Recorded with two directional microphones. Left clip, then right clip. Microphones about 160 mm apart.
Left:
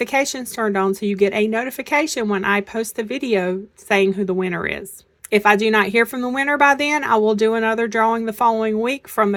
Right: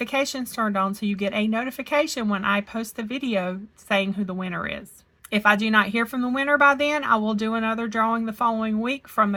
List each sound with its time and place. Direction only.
0.0 s speech: 40° left (ahead or behind)